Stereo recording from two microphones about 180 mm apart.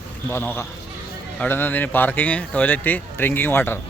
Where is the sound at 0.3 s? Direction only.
15° left (ahead or behind).